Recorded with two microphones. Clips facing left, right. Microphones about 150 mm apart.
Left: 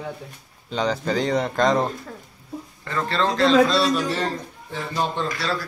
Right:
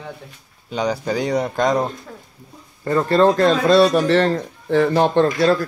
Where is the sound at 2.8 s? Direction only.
40° right (ahead or behind); by 5.2 s 65° right (ahead or behind).